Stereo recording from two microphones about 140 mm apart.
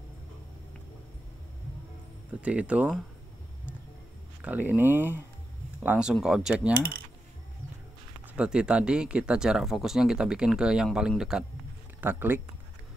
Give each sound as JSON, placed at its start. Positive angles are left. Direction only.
{"t": 2.4, "sound": "speech", "side_deg": -10}
{"t": 4.4, "sound": "speech", "side_deg": -10}
{"t": 8.4, "sound": "speech", "side_deg": -5}
{"t": 12.0, "sound": "speech", "side_deg": -15}